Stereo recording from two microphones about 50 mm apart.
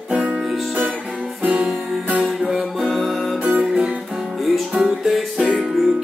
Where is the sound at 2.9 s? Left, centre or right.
Centre.